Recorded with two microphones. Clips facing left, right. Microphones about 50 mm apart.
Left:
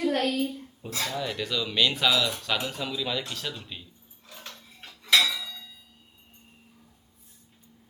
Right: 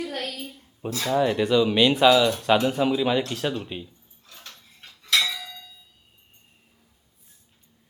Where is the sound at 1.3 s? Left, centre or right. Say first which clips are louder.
Right 10 dB; centre.